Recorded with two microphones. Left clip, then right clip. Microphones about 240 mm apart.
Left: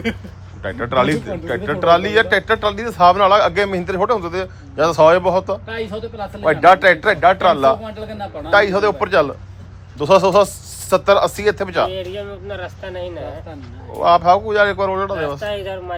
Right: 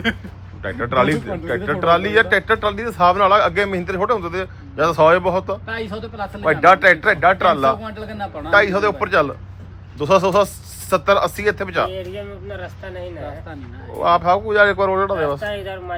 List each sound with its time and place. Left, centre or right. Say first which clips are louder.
0.6 s speech: left 1 dB; centre
5.6 s speech: left 1 dB; centre
6.4 s speech: left 1 dB; centre
7.8 s speech: even; centre
8.4 s speech: left 1 dB; centre